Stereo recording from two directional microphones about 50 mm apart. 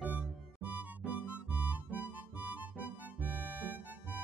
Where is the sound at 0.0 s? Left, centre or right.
Right.